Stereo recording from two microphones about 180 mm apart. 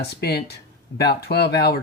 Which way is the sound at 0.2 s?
65° left (ahead or behind).